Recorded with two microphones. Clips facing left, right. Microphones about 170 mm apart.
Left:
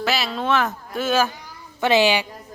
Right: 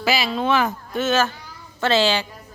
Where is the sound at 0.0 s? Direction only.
Centre (ahead or behind); by 2.2 s 15° left (ahead or behind).